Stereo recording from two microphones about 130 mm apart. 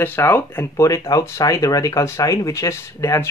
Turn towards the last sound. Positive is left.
turn(degrees=20)  # may be behind; listen again after turning